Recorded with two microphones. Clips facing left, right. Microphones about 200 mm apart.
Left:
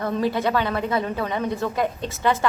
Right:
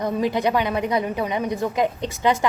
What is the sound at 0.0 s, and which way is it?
A woman's voice, 15° right (ahead or behind).